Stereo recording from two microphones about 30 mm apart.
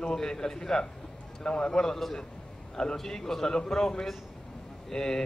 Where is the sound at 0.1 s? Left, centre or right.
Centre.